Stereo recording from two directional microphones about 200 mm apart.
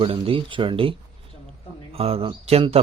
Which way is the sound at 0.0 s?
25° right (ahead or behind).